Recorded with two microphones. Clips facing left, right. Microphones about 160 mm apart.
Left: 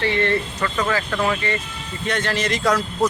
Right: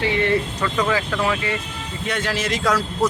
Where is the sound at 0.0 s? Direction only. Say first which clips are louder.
Right 1 dB; 10° right (ahead or behind).